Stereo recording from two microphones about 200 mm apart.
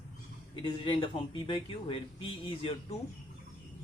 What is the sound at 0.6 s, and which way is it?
Speech, 25° left (ahead or behind).